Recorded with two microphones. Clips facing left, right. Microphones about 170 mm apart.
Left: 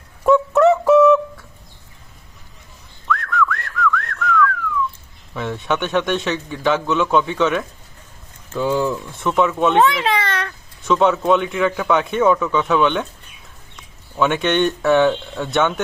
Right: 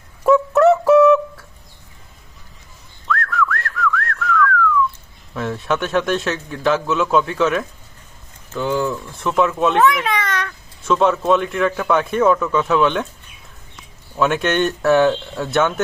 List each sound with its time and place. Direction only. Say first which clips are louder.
0.3 s fowl: right 1 dB; centre (ahead or behind)
3.1 s whistling: even; centre (ahead or behind)
5.3 s a man's voice: right 1 dB; centre (ahead or behind)
8.5 s speech: left 1 dB; 10° left (ahead or behind)
9.0 s a man's voice: even; centre (ahead or behind)
9.7 s a sound: even; 30° left (ahead or behind)
10.8 s a man's voice: even; centre (ahead or behind)
14.2 s a man's voice: even; 5° right (ahead or behind)